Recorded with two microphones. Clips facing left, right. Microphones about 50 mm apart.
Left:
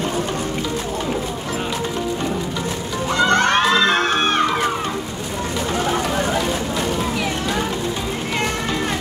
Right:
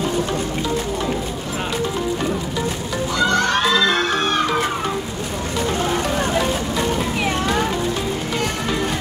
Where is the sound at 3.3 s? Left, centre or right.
Left.